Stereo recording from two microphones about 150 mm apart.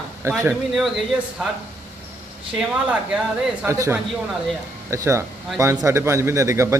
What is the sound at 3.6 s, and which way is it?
A man's voice, 20° right (ahead or behind).